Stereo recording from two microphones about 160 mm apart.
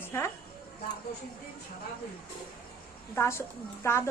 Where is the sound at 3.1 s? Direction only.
15° left (ahead or behind).